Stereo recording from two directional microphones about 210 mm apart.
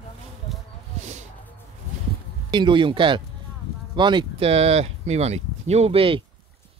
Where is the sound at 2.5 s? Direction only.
20° right (ahead or behind).